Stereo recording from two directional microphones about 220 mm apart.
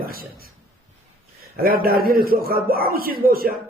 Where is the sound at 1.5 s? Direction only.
40° right (ahead or behind).